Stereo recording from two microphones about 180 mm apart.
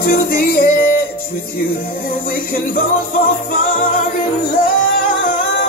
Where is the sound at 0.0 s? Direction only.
55° left (ahead or behind).